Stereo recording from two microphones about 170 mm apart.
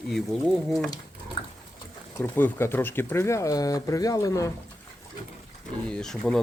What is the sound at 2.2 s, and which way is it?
Speech, 15° left (ahead or behind).